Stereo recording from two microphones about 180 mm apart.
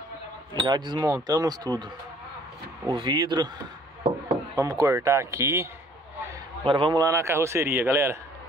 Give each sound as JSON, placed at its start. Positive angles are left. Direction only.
{"t": 0.6, "sound": "speech", "side_deg": -25}
{"t": 2.9, "sound": "speech", "side_deg": -25}
{"t": 4.6, "sound": "a man's voice", "side_deg": -20}
{"t": 6.6, "sound": "a man's voice", "side_deg": -30}